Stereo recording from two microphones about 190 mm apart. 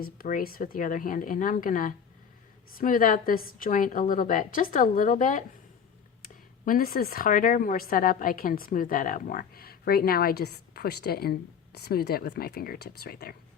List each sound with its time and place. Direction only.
0.0 s speech: 50° left (ahead or behind)